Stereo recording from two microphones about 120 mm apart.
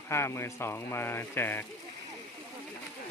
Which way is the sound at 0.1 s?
20° left (ahead or behind).